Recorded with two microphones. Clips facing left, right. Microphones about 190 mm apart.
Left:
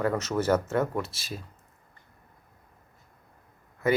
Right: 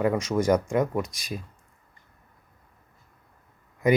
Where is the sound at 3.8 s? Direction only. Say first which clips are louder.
Right 3 dB; 15° right (ahead or behind).